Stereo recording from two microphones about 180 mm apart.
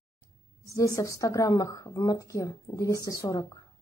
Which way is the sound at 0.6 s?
15° left (ahead or behind).